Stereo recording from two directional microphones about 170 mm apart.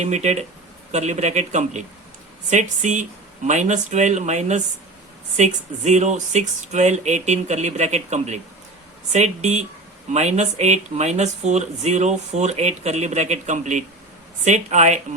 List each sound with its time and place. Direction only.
0.0 s speech: 40° right (ahead or behind)